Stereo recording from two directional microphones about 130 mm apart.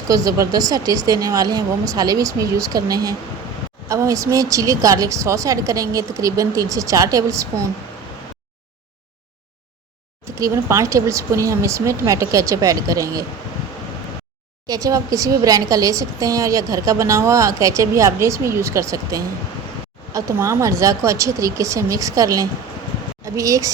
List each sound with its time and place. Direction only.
0.1 s a woman's voice: 25° right (ahead or behind)
10.3 s a woman's voice: 25° right (ahead or behind)
14.7 s a woman's voice: 25° right (ahead or behind)